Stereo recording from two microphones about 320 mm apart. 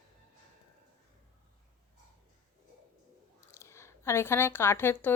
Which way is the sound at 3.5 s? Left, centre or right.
Centre.